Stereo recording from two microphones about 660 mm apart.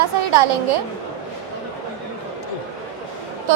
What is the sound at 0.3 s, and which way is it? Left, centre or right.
Speech, right.